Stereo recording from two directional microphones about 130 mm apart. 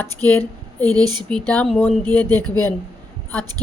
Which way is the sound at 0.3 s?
15° left (ahead or behind).